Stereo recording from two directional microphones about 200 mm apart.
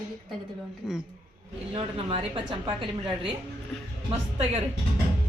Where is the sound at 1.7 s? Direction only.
30° right (ahead or behind).